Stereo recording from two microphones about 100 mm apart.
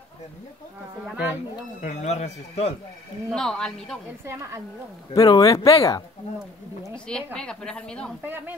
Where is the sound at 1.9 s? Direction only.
90° left.